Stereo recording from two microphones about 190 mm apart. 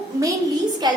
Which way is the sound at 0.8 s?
20° right (ahead or behind).